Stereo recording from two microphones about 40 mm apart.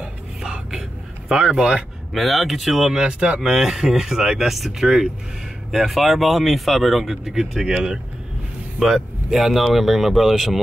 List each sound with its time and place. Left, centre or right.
1.3 s speech: centre
2.1 s speech: centre
3.0 s speech: right
3.3 s speech: centre
7.2 s speech: centre
8.7 s speech: centre